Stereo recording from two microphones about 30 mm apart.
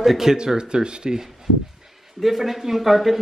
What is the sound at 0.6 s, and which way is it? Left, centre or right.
Speech, right.